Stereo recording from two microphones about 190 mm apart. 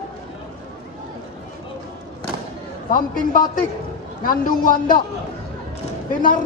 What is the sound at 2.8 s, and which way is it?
A man's voice, 45° left (ahead or behind).